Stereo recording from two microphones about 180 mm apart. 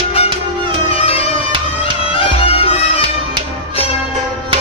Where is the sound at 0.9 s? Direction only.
35° left (ahead or behind).